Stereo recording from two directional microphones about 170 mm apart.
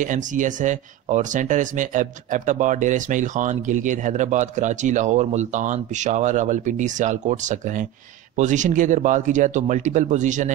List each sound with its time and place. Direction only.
0.0 s speech: 50° right (ahead or behind)